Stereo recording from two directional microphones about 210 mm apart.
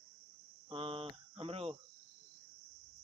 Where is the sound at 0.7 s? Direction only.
25° right (ahead or behind).